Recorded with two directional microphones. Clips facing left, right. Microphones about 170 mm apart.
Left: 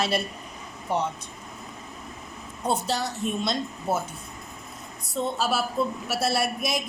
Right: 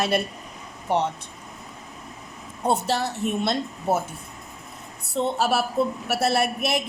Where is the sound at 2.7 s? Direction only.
60° right (ahead or behind).